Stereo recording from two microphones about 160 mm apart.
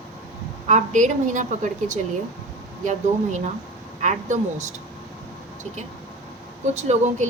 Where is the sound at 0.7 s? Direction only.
50° right (ahead or behind).